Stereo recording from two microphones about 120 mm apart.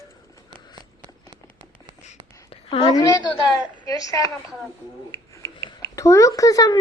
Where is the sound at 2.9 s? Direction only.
35° left (ahead or behind).